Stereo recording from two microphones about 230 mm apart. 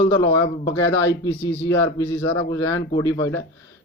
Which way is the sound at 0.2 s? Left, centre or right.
Centre.